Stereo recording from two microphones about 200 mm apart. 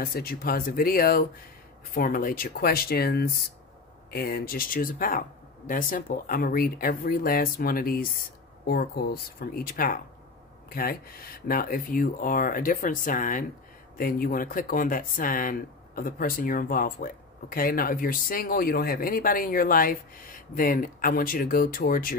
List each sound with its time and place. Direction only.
0.0 s speech: 50° left (ahead or behind)